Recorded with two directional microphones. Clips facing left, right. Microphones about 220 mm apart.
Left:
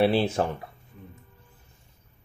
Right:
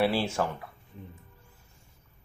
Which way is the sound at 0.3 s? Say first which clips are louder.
Left 3 dB; 35° left (ahead or behind).